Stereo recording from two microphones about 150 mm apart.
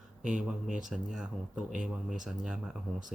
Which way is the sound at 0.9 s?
5° right (ahead or behind).